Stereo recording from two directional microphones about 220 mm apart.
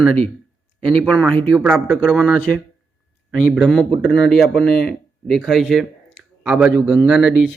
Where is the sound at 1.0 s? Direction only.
5° left (ahead or behind).